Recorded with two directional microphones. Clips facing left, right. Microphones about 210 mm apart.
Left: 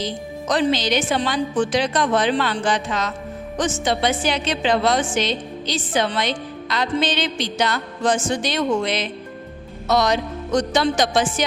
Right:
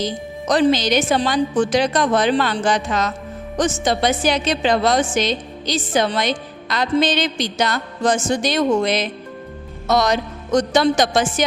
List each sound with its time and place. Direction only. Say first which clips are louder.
0.0 s a woman's voice: right 2 dB; 45° right (ahead or behind)